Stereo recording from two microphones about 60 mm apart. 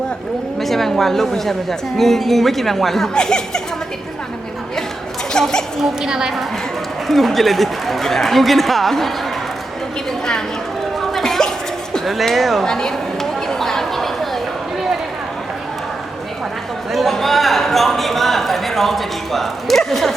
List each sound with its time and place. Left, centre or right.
0.6 s a man's voice: centre
5.3 s speech: centre
5.8 s a woman's voice: centre
7.1 s a man's voice: centre
11.0 s a sound: centre
12.0 s a man's voice: centre
13.5 s chatter: centre
16.9 s a sound: centre